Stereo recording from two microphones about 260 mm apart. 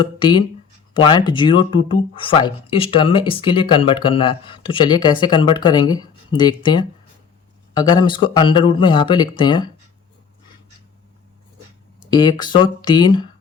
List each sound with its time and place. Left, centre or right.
0.0 s speech: centre
12.1 s speech: centre